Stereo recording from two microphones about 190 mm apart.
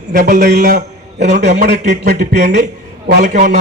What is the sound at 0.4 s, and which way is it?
Speech, 55° right (ahead or behind).